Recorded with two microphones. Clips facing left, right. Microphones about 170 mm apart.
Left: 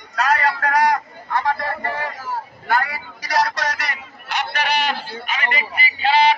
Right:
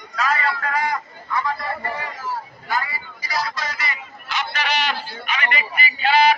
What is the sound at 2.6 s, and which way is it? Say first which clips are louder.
Vehicle: left 5 dB; 65° left (ahead or behind).